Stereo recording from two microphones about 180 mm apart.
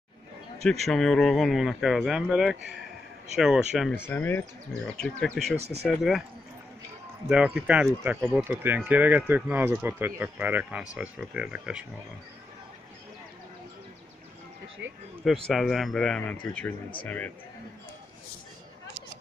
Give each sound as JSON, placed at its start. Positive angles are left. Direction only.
{"t": 0.6, "sound": "speech", "side_deg": 0}
{"t": 4.1, "sound": "speech", "side_deg": 10}
{"t": 7.2, "sound": "speech", "side_deg": -5}
{"t": 15.2, "sound": "speech", "side_deg": 0}